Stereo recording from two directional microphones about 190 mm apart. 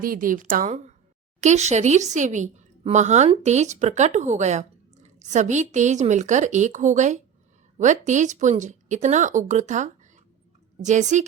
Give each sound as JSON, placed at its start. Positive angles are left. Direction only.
{"t": 0.0, "sound": "a woman's voice", "side_deg": -45}